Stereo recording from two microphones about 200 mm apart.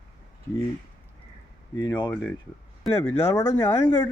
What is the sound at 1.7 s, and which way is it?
Speech, 20° left (ahead or behind).